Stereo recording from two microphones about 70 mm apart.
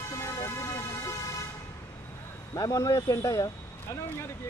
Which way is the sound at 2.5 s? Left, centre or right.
Left.